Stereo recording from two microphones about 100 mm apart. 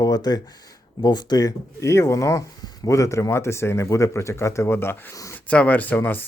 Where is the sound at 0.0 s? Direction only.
45° left (ahead or behind).